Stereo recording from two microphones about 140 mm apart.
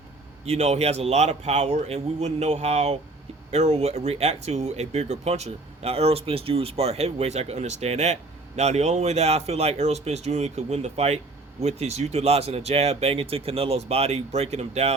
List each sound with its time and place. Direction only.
0.4 s speech: 50° right (ahead or behind)